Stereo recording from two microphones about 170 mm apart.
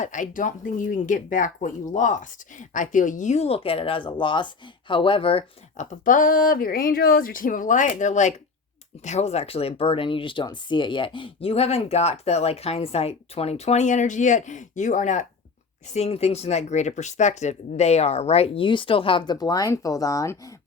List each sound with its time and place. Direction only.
0.0 s speech: 50° left (ahead or behind); by 20.5 s 20° left (ahead or behind)